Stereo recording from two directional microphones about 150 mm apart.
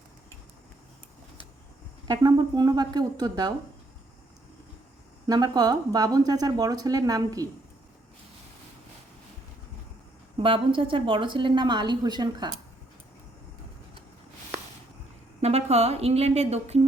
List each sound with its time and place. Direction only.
2.0 s speech: 25° right (ahead or behind)
5.2 s speech: 25° right (ahead or behind)
10.3 s a woman's voice: 35° right (ahead or behind)
15.4 s speech: 45° right (ahead or behind)